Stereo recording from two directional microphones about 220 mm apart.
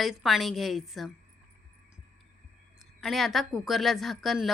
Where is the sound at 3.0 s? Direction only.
Centre (ahead or behind).